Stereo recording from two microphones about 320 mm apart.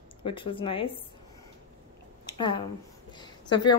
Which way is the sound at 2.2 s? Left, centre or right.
Centre.